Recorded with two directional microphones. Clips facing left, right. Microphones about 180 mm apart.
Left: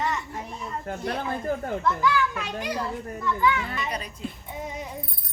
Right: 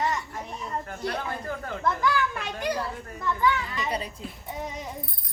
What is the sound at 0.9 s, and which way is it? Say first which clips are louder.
Speech: left 6 dB; 30° left (ahead or behind).